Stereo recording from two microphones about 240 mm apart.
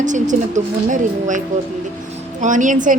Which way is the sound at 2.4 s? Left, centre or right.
Right.